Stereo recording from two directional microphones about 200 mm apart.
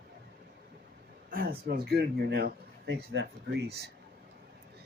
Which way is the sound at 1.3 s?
45° right (ahead or behind).